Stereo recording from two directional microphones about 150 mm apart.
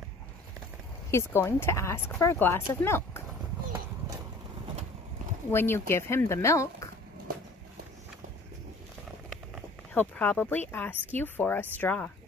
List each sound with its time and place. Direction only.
1.1 s speech: 15° left (ahead or behind)
5.5 s speech: 15° left (ahead or behind)
9.9 s speech: 10° left (ahead or behind)